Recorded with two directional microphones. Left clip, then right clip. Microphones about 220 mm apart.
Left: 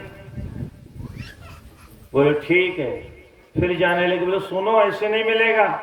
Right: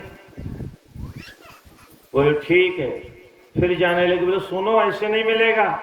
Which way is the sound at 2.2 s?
20° right (ahead or behind).